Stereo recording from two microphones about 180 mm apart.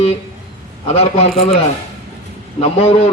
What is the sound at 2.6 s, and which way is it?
Speech, 35° left (ahead or behind).